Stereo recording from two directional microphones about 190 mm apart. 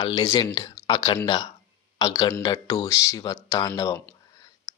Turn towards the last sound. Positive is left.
turn(degrees=15)  # may be behind; listen again after turning